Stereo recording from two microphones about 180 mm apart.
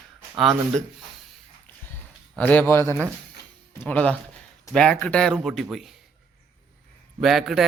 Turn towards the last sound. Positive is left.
turn(degrees=0)  # may be behind; listen again after turning